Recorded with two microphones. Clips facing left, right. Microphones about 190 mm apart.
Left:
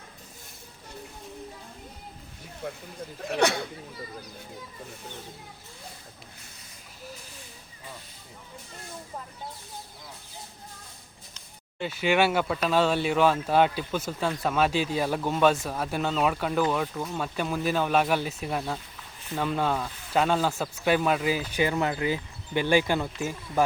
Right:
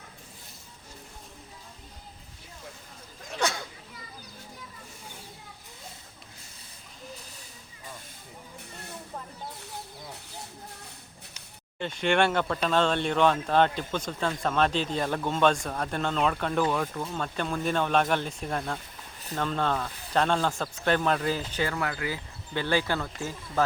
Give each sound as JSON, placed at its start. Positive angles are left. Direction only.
{"t": 2.6, "sound": "speech", "side_deg": 60}
{"t": 11.8, "sound": "speech", "side_deg": 5}